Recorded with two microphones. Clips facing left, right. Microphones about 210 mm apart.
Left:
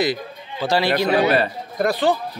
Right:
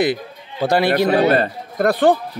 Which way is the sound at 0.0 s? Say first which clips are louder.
Right 3 dB; 55° right (ahead or behind).